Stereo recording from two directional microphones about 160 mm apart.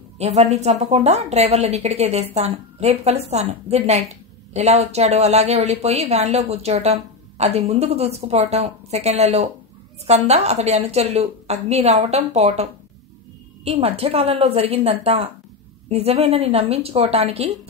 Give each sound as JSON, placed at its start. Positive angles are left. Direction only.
{"t": 0.2, "sound": "a woman's voice", "side_deg": -45}
{"t": 13.7, "sound": "a woman's voice", "side_deg": -35}